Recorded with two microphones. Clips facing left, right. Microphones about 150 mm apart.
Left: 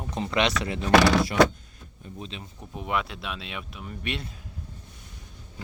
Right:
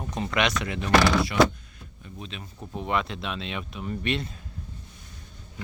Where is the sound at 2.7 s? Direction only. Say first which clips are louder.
Right 2 dB; 5° left (ahead or behind).